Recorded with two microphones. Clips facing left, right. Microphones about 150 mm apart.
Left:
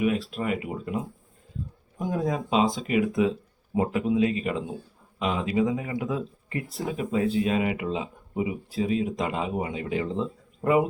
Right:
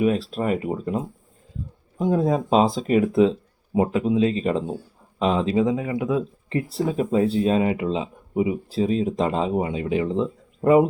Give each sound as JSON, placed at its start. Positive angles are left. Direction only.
{"t": 0.0, "sound": "speech", "side_deg": -35}